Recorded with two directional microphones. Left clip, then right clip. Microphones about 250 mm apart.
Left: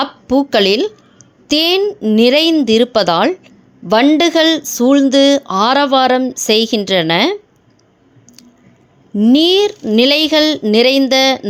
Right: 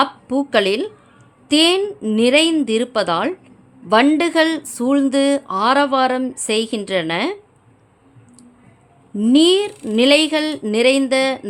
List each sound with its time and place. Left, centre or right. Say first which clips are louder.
0.0 s a woman's voice: left 3 dB; centre
9.1 s a woman's voice: left 3 dB; centre